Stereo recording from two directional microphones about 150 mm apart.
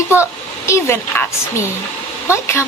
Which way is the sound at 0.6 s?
15° left (ahead or behind).